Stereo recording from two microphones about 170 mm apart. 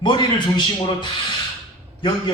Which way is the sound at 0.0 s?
25° left (ahead or behind).